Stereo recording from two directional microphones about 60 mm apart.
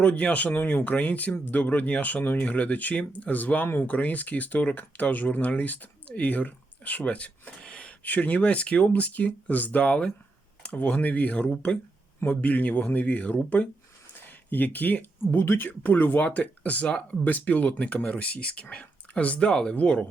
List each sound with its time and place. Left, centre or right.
0.0 s speech: left